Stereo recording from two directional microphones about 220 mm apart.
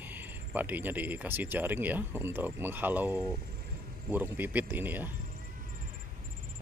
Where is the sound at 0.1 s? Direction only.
5° right (ahead or behind).